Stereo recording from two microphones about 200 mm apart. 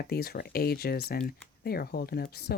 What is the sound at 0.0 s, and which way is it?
Speech, 50° left (ahead or behind).